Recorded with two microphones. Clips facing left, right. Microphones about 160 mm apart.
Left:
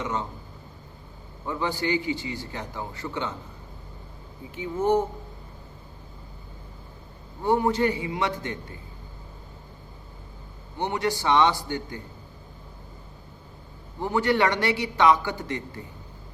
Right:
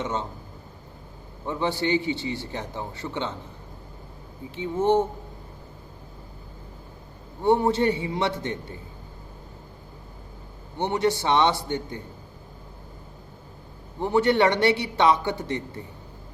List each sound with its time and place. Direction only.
0.0 s a man's voice: 25° right (ahead or behind)
1.5 s a man's voice: 25° right (ahead or behind)
4.5 s a man's voice: 25° right (ahead or behind)
7.4 s a man's voice: 25° right (ahead or behind)
10.8 s a man's voice: 20° right (ahead or behind)
14.0 s a man's voice: 25° right (ahead or behind)